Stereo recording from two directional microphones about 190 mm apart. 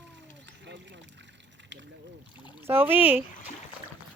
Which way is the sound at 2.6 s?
10° right (ahead or behind).